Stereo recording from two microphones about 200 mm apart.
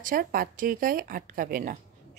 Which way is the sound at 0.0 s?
45° right (ahead or behind).